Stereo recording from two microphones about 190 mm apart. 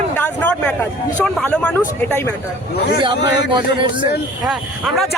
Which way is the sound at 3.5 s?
25° right (ahead or behind).